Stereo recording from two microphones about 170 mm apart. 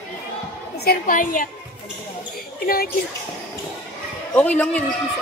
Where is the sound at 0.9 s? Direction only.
55° left (ahead or behind).